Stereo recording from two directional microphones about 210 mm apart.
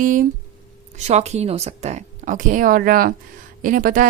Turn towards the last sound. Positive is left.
turn(degrees=-40)  # may be behind; listen again after turning